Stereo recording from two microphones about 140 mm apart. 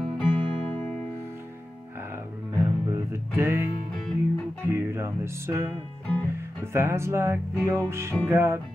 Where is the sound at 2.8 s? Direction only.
20° right (ahead or behind).